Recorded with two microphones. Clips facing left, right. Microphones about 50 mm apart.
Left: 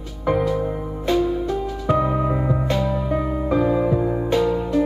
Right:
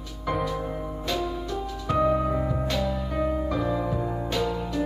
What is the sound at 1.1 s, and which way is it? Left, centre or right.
Music, left.